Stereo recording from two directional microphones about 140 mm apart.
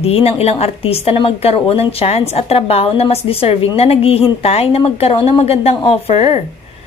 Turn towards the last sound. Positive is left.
turn(degrees=45)  # may be behind; listen again after turning